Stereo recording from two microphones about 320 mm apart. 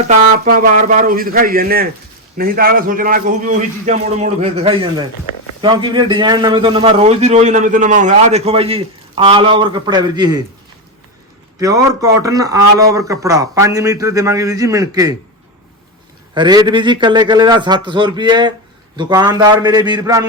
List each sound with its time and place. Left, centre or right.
0.1 s a man's voice: right
11.6 s a man's voice: centre
16.3 s a man's voice: centre